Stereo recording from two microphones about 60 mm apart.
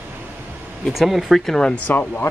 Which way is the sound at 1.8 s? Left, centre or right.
Left.